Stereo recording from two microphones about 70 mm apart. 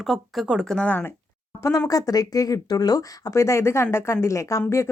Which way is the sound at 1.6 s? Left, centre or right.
Left.